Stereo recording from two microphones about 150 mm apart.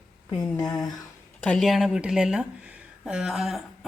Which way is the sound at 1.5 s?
Centre (ahead or behind).